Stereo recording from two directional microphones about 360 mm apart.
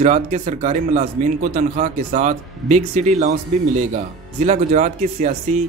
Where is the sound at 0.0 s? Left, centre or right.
Centre.